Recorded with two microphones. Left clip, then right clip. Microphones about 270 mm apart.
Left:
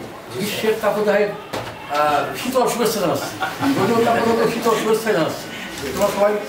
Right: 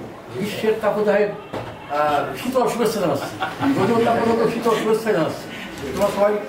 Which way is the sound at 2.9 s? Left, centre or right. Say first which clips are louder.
Left 1 dB; centre.